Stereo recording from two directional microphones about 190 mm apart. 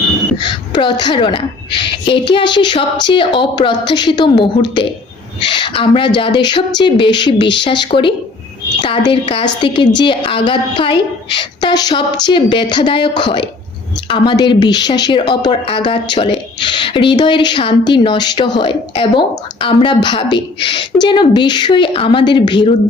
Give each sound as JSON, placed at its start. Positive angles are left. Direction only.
{"t": 0.3, "sound": "speech", "side_deg": 25}
{"t": 5.5, "sound": "a sound", "side_deg": 25}
{"t": 6.1, "sound": "speech", "side_deg": 25}